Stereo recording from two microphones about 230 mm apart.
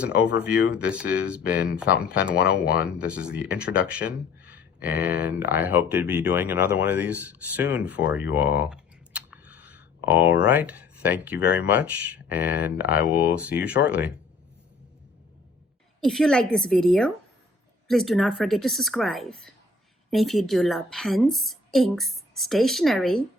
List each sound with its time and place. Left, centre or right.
0.3 s a woman's voice: centre
2.4 s speech: left
2.8 s speech: centre
16.0 s a woman's voice: centre